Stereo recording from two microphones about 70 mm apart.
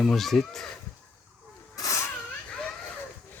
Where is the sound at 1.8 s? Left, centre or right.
Left.